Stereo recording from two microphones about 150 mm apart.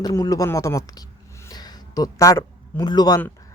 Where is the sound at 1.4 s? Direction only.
25° left (ahead or behind).